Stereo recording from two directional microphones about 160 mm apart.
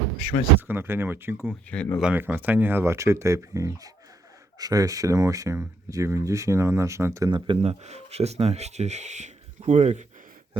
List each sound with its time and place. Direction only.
0.3 s speech: 45° left (ahead or behind)
0.7 s speech: 15° right (ahead or behind)
1.5 s speech: 5° left (ahead or behind)
2.0 s speech: 10° right (ahead or behind); by 10.1 s 45° right (ahead or behind)